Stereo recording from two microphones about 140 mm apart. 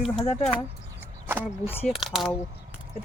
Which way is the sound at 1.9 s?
Centre (ahead or behind).